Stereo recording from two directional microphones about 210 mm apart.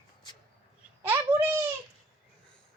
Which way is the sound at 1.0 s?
10° right (ahead or behind).